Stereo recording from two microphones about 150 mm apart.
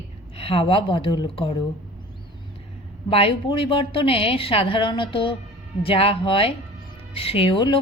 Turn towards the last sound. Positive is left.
turn(degrees=35)  # may be behind; listen again after turning